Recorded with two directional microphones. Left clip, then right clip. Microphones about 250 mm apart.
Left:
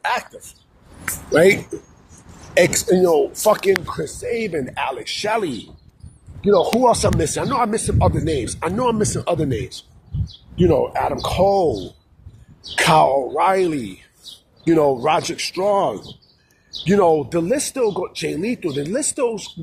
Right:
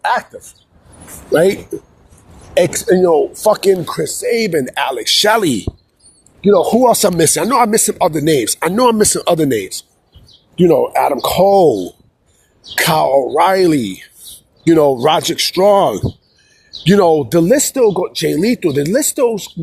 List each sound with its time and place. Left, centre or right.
0.0 s speech: right
2.6 s speech: right
3.9 s speech: right